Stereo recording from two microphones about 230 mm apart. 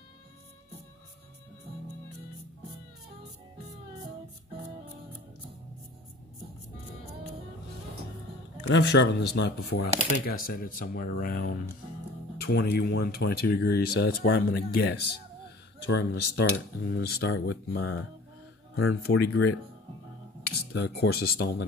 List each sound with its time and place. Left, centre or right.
8.6 s speech: left
18.8 s speech: left
20.7 s speech: left